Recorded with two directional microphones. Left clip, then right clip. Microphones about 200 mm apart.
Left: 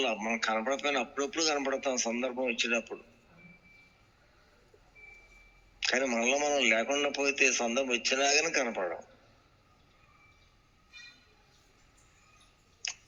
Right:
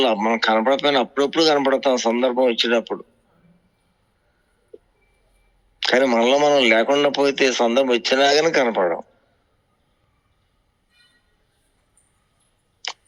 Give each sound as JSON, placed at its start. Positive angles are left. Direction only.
{"t": 0.0, "sound": "speech", "side_deg": -55}
{"t": 5.8, "sound": "speech", "side_deg": -55}